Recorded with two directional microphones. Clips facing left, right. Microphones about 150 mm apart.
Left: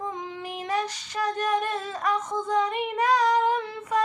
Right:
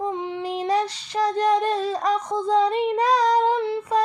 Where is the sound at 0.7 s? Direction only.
35° right (ahead or behind).